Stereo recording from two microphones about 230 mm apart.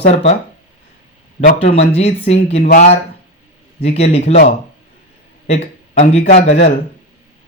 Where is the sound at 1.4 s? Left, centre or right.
Left.